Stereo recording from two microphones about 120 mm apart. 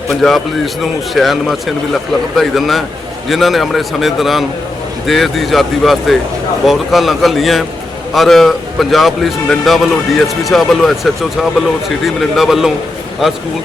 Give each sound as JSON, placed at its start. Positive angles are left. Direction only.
{"t": 0.1, "sound": "a man's voice", "side_deg": 0}